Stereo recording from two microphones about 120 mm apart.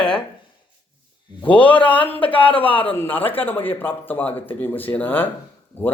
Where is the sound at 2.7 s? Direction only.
45° left (ahead or behind).